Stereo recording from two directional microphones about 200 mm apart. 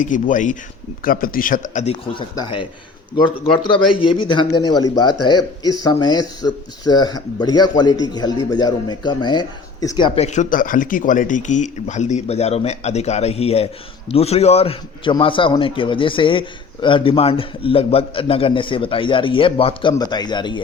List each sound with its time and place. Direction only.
0.0 s a man's voice: 40° left (ahead or behind); by 10.1 s 20° left (ahead or behind)
10.2 s a man's voice: 35° left (ahead or behind)